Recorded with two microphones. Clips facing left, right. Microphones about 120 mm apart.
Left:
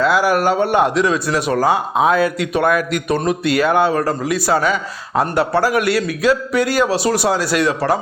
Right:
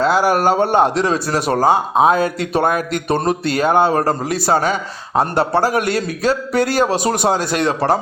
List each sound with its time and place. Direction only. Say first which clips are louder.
0.0 s speech: even; 30° right (ahead or behind)
6.8 s speech: even; 50° right (ahead or behind)
7.3 s a man's voice: even; 20° right (ahead or behind)